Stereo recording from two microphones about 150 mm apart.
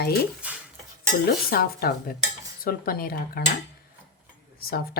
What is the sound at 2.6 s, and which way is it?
Speech, 80° left.